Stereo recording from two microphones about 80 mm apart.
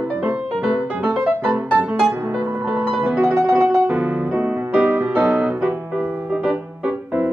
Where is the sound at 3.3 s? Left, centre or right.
Right.